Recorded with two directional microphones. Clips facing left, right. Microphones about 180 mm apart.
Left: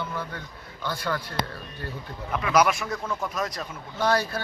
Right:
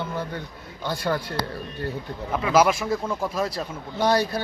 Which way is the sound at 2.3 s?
25° right (ahead or behind).